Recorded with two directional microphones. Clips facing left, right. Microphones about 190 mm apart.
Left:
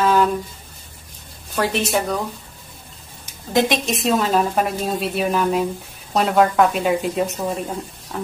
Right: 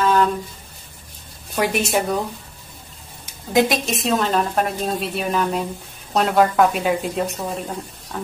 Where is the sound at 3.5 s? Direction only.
5° right (ahead or behind).